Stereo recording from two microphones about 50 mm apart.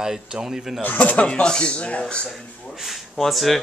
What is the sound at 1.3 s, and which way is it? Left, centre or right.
Speech, centre.